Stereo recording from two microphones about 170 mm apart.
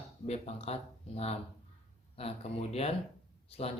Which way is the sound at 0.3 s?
40° left (ahead or behind).